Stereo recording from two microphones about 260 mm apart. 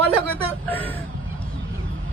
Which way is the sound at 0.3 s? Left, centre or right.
Centre.